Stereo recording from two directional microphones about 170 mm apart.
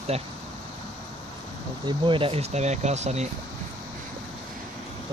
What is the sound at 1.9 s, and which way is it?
Speech, 30° right (ahead or behind).